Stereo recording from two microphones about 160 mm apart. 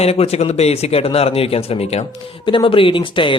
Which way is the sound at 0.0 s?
40° left (ahead or behind).